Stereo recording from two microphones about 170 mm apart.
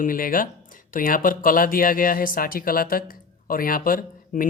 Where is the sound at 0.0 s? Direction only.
55° left (ahead or behind).